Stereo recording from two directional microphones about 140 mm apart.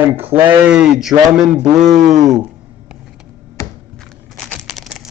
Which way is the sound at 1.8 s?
60° right (ahead or behind).